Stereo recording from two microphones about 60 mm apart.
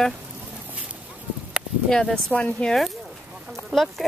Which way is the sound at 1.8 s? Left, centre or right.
Centre.